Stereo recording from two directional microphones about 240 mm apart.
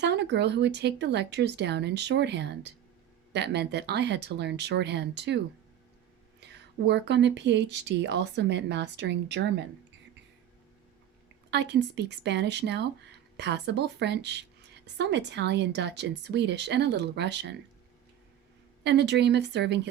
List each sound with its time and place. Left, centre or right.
0.0 s speech: right
6.4 s speech: right
11.5 s speech: right
18.8 s speech: right